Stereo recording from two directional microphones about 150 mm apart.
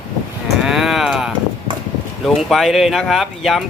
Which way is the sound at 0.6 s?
Centre (ahead or behind).